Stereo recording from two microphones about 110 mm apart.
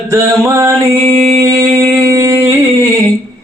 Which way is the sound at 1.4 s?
25° right (ahead or behind).